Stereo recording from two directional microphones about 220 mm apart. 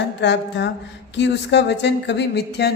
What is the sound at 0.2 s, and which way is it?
A woman's voice, 50° left (ahead or behind).